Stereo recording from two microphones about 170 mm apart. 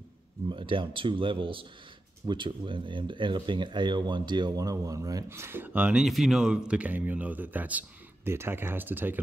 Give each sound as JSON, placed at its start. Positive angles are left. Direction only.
{"t": 0.5, "sound": "speech", "side_deg": -30}